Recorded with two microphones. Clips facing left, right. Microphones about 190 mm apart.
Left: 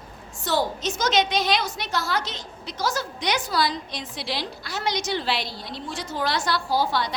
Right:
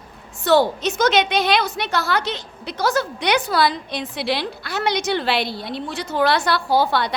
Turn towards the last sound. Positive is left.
turn(degrees=-60)  # may be behind; listen again after turning